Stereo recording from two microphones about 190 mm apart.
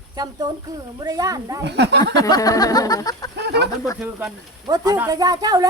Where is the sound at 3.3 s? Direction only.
60° right (ahead or behind).